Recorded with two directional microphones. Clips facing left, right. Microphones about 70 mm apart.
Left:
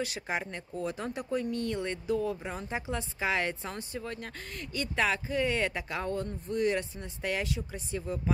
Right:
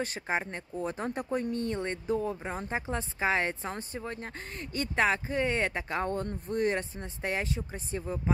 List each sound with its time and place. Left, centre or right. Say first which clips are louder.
0.0 s a woman's voice: right 2 dB; right